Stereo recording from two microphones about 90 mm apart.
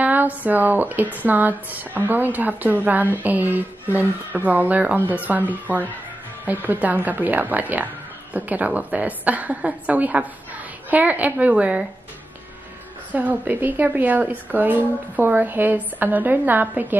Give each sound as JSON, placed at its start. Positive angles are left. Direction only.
{"t": 0.0, "sound": "a woman's voice", "side_deg": -20}
{"t": 13.1, "sound": "speech", "side_deg": -20}